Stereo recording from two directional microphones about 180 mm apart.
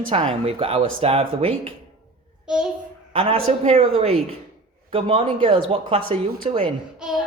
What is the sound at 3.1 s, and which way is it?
Speech, 30° right (ahead or behind).